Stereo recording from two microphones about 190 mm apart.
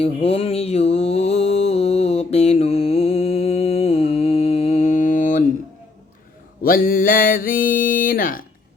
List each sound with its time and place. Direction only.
0.0 s mantra: 30° left (ahead or behind)
6.6 s mantra: 50° left (ahead or behind)